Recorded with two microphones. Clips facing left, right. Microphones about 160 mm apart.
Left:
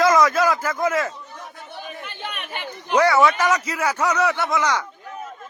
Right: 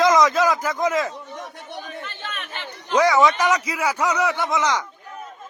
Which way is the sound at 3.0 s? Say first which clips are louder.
Even; 15° right (ahead or behind).